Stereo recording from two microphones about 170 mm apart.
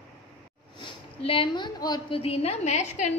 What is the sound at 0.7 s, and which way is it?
A woman's voice, 30° left (ahead or behind).